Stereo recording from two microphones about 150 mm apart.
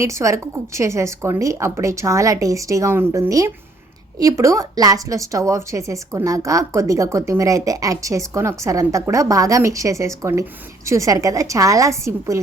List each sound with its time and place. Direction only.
0.0 s a woman's voice: 20° right (ahead or behind)